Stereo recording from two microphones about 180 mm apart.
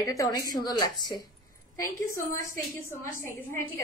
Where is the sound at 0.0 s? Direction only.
20° left (ahead or behind).